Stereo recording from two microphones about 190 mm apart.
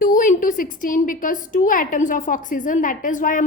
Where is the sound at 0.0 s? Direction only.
45° left (ahead or behind).